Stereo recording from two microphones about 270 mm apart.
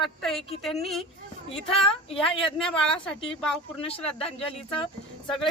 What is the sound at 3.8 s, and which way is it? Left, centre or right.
Speech, left.